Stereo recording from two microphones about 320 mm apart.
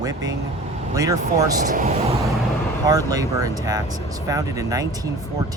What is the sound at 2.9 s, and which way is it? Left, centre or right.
Speech, centre.